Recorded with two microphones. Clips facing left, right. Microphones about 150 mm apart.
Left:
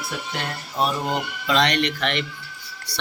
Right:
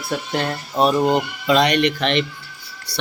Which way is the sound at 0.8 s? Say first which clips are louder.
Right 6 dB; 25° right (ahead or behind).